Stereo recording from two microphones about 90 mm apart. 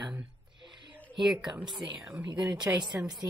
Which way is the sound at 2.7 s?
25° right (ahead or behind).